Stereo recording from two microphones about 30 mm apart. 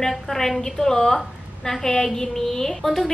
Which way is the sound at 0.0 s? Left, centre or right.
Centre.